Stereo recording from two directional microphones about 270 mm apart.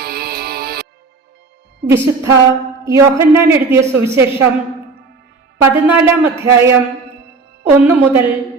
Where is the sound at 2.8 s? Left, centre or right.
Centre.